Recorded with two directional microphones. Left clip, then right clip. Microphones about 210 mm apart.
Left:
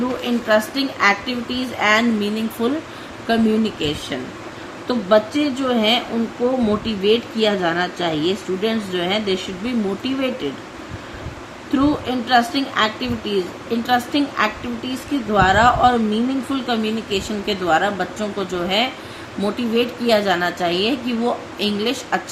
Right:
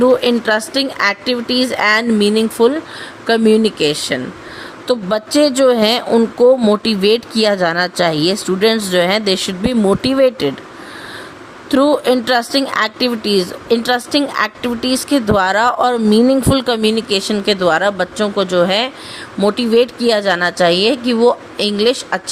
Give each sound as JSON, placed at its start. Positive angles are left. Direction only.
{"t": 0.3, "sound": "speech", "side_deg": -50}
{"t": 11.7, "sound": "speech", "side_deg": -55}